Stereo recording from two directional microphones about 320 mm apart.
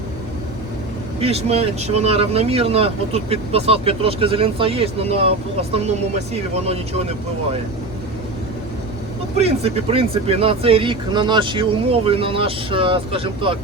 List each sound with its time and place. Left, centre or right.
1.2 s speech: centre
9.4 s speech: centre